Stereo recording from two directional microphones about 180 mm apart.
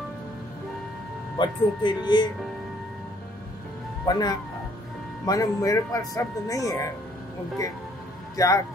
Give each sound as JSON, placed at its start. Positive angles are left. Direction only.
{"t": 1.4, "sound": "speech", "side_deg": 25}
{"t": 4.0, "sound": "speech", "side_deg": 20}
{"t": 8.4, "sound": "a man's voice", "side_deg": 15}